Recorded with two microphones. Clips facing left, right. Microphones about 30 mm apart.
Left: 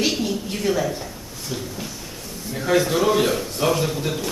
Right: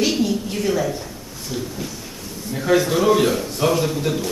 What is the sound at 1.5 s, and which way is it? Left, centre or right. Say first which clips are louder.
A man's voice: right 2 dB; centre.